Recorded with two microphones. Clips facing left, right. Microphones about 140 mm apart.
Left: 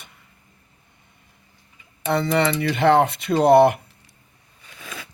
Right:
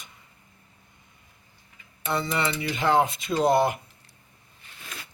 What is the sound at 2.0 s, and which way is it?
Speech, 65° left (ahead or behind).